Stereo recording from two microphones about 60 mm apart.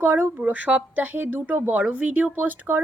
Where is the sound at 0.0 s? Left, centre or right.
Right.